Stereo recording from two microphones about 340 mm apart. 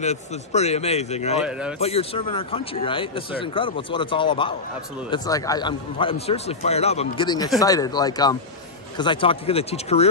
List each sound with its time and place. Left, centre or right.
0.0 s a man's voice: centre
1.4 s speech: centre
1.8 s a man's voice: centre